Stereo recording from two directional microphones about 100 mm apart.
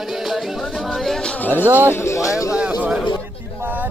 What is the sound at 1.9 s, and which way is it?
Speech, 30° left (ahead or behind).